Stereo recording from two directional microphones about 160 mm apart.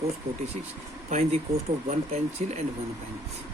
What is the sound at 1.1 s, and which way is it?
Speech, 40° right (ahead or behind).